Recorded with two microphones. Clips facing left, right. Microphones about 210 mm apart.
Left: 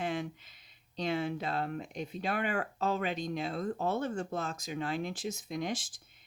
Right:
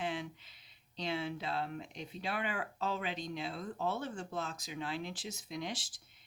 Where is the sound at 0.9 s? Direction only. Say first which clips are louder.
Left 5 dB; 45° left (ahead or behind).